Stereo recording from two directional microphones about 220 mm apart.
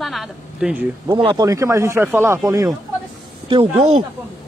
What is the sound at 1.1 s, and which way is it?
Speech, 20° right (ahead or behind).